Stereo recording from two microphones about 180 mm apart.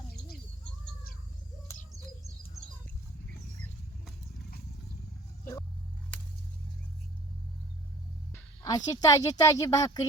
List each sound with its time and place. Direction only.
1.7 s bird: 15° left (ahead or behind)
8.3 s a woman's voice: 20° left (ahead or behind)